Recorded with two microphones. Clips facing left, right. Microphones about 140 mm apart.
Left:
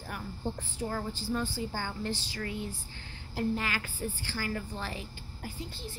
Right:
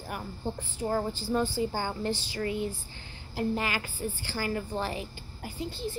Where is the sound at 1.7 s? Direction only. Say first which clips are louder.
Right 4 dB; 15° right (ahead or behind).